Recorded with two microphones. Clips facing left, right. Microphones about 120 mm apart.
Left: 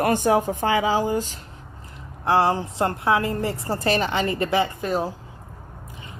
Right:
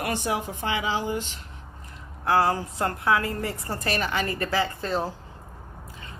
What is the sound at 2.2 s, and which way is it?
A woman's voice, 25° left (ahead or behind).